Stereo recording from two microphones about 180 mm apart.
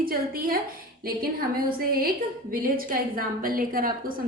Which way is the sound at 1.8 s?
55° right (ahead or behind).